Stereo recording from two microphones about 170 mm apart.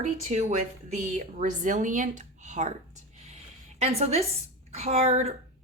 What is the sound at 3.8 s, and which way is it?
Speech, 40° right (ahead or behind).